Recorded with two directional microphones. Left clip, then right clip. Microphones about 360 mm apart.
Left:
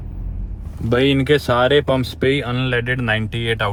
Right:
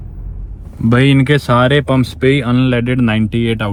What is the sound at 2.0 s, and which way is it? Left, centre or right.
Speech, centre.